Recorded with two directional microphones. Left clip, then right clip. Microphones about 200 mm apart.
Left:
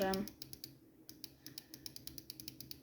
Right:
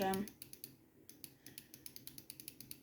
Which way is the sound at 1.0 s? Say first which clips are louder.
Left 5 dB; 55° left (ahead or behind).